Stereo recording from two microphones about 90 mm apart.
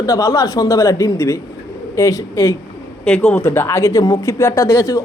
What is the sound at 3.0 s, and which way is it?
Speech, 10° left (ahead or behind).